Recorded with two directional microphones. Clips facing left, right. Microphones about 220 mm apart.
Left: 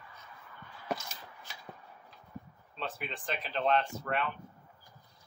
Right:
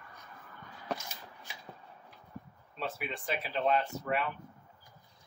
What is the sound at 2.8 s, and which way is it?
Speech, 5° right (ahead or behind).